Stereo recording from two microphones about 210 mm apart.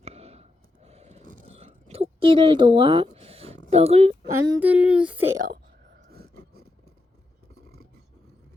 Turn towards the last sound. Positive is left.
turn(degrees=-50)  # may be behind; listen again after turning